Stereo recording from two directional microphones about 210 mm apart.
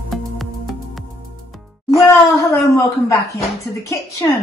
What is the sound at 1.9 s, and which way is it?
Music, 15° left (ahead or behind).